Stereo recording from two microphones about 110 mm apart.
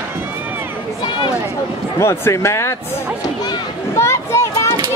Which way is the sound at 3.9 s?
25° left (ahead or behind).